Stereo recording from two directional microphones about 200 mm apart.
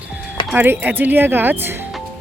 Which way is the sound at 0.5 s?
10° right (ahead or behind).